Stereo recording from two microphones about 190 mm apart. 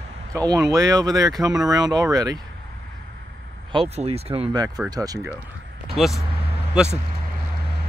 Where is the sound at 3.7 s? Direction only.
30° right (ahead or behind).